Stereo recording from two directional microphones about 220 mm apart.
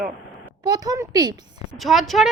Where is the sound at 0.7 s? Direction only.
15° right (ahead or behind).